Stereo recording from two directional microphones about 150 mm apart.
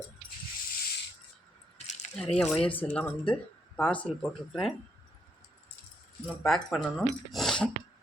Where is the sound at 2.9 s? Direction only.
10° left (ahead or behind).